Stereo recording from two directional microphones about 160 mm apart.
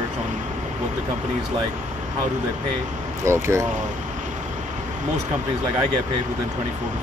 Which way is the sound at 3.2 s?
20° right (ahead or behind).